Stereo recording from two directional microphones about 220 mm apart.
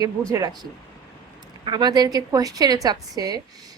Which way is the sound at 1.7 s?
20° right (ahead or behind).